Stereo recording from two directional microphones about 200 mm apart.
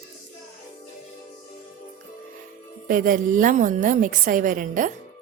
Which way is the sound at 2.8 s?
45° right (ahead or behind).